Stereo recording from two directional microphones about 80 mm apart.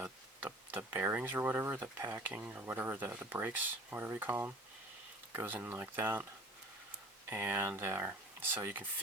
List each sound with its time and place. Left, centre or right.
0.0 s speech: right
7.3 s speech: right